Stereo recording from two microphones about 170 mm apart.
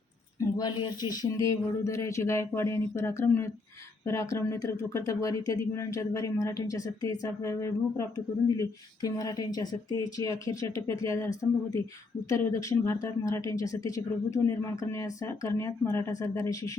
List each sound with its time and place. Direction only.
0.3 s speech: 20° left (ahead or behind)